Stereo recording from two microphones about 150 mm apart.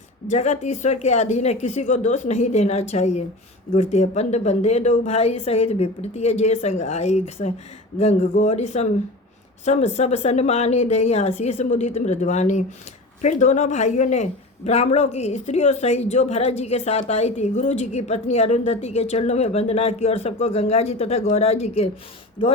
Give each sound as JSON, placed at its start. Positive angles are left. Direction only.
{"t": 0.3, "sound": "speech", "side_deg": 50}